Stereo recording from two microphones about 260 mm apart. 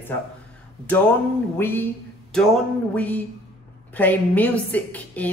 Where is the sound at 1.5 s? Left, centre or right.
Centre.